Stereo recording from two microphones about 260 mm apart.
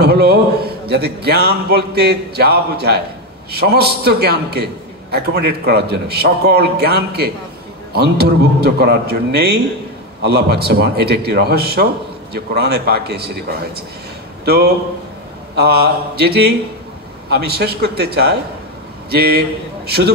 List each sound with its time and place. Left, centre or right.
0.0 s a man's voice: right
14.4 s a man's voice: right